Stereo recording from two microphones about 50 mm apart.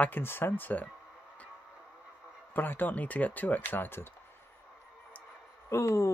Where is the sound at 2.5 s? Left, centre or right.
Left.